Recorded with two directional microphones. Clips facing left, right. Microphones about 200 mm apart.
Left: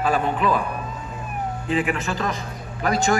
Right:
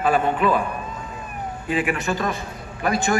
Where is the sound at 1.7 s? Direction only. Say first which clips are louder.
Right 1 dB; 15° right (ahead or behind).